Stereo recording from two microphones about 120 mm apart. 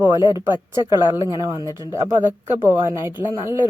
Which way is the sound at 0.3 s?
20° right (ahead or behind).